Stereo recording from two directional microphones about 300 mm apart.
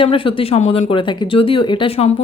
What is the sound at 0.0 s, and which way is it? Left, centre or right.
Speech, centre.